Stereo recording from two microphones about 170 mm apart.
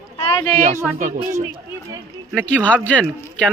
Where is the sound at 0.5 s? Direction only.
45° right (ahead or behind).